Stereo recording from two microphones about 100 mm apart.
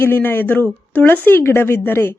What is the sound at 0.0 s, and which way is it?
Speech, 20° left (ahead or behind).